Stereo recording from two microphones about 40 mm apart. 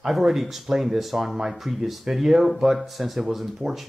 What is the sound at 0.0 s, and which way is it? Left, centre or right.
Speech, centre.